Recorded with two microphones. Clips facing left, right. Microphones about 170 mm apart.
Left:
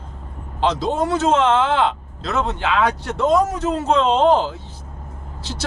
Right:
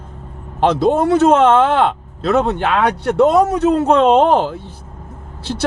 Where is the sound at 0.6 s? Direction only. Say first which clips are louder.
Right 6 dB; 55° right (ahead or behind).